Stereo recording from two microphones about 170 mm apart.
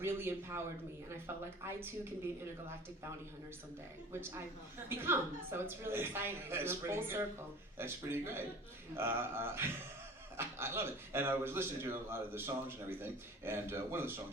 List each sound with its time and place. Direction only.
0.0 s a man's voice: 15° right (ahead or behind)
4.1 s a man's voice: 15° right (ahead or behind)